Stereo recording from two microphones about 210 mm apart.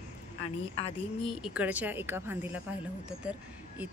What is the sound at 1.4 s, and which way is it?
Speech, 5° right (ahead or behind).